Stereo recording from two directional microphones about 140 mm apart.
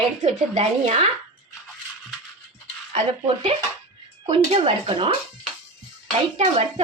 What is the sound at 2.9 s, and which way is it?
Speech, 40° right (ahead or behind).